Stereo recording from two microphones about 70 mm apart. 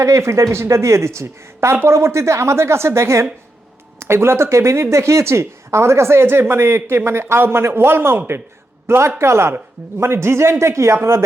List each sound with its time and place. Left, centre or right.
0.0 s speech: right